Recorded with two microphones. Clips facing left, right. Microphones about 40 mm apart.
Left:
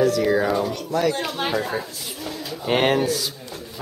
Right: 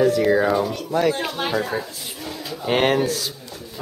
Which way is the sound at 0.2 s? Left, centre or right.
Centre.